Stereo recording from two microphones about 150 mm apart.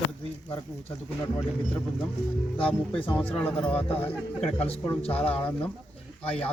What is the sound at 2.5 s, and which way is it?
Speech, 35° left (ahead or behind).